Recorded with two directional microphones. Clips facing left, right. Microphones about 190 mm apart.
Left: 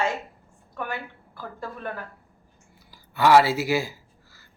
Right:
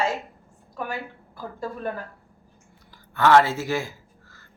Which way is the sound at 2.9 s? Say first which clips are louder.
Even; 10° left (ahead or behind).